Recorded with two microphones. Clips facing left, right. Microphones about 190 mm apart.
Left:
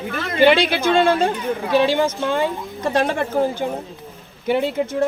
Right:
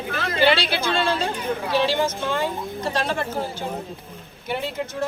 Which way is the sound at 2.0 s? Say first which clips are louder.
Left 4 dB; 55° left (ahead or behind).